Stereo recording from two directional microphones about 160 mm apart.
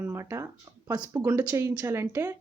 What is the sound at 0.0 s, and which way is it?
Speech, 15° right (ahead or behind).